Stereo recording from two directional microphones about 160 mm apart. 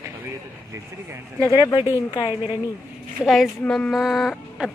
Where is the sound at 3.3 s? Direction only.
Centre (ahead or behind).